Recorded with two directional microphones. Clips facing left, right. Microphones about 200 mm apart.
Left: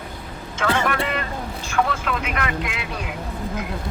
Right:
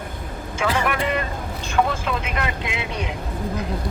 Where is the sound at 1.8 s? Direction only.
25° right (ahead or behind).